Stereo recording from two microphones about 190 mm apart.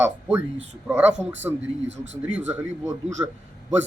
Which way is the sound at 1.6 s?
75° right (ahead or behind).